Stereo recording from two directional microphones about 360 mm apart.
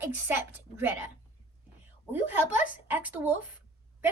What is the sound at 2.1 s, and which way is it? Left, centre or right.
A woman's voice, centre.